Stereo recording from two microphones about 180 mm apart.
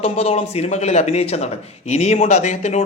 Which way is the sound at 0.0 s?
35° left (ahead or behind).